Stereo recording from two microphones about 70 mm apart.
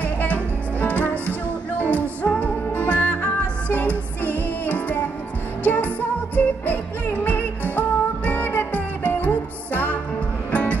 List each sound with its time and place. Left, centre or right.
0.0 s music: left